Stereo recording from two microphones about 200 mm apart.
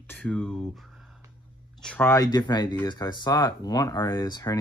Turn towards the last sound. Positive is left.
turn(degrees=20)  # may be behind; listen again after turning